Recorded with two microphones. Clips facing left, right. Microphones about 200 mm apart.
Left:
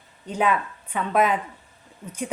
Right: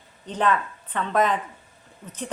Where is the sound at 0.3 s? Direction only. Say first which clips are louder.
Even; 10° left (ahead or behind).